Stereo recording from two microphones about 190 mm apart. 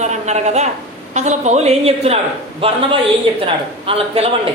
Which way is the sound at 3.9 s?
30° right (ahead or behind).